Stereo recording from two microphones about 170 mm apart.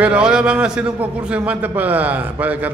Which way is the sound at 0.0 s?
5° right (ahead or behind).